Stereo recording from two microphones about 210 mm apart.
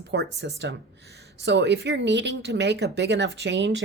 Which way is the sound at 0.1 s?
55° right (ahead or behind).